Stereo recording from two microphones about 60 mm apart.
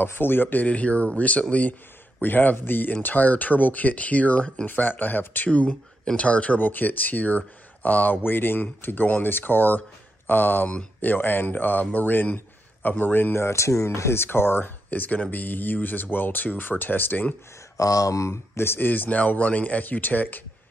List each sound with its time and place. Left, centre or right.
0.0 s speech: left
14.9 s speech: left
17.7 s speech: left